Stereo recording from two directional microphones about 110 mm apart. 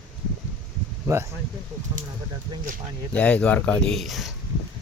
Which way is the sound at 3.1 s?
10° left (ahead or behind).